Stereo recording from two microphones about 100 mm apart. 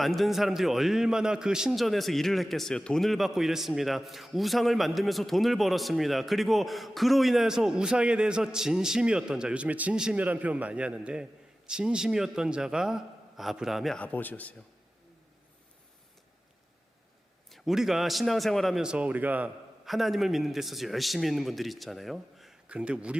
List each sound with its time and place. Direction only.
0.0 s a man's voice: centre (ahead or behind)
14.0 s a man's voice: 15° left (ahead or behind)
17.5 s a man's voice: 5° right (ahead or behind)
19.8 s a man's voice: centre (ahead or behind)
22.7 s speech: 10° right (ahead or behind)